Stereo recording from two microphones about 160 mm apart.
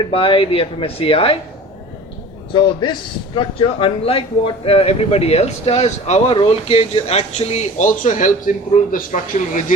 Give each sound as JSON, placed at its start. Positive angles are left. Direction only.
{"t": 0.1, "sound": "a man's voice", "side_deg": 35}
{"t": 2.5, "sound": "a man's voice", "side_deg": 30}